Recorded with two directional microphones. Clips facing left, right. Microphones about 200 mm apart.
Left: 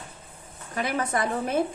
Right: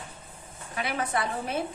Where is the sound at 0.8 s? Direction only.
45° left (ahead or behind).